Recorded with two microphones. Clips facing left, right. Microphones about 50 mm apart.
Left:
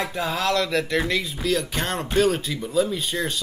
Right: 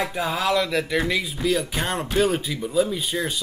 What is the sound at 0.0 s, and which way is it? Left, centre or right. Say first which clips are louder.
Speech: right 1 dB; centre.